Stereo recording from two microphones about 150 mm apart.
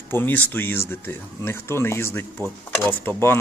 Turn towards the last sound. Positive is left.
turn(degrees=15)  # may be behind; listen again after turning